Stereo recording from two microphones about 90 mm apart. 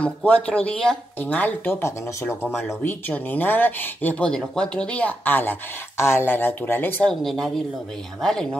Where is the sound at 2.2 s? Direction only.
20° left (ahead or behind).